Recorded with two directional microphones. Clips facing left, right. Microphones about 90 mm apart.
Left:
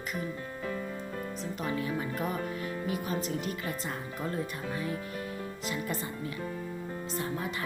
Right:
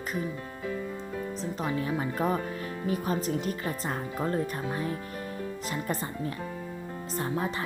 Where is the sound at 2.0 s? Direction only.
30° right (ahead or behind).